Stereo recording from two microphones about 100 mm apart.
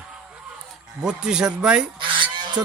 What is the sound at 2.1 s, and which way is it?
Goose, 45° right (ahead or behind).